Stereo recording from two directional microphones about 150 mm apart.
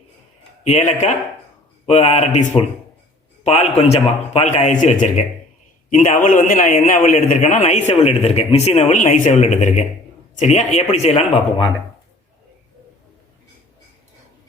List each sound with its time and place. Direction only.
0.6 s a man's voice: 50° left (ahead or behind)